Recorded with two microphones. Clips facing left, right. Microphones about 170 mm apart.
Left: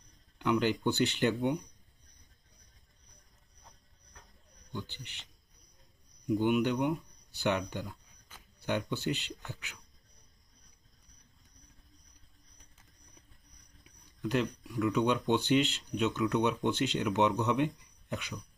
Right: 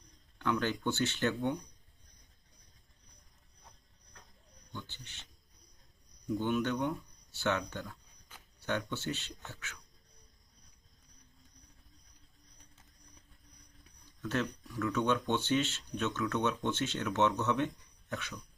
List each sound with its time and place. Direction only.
0.3 s speech: 15° left (ahead or behind)
4.7 s a man's voice: 15° left (ahead or behind)
14.2 s speech: 15° left (ahead or behind)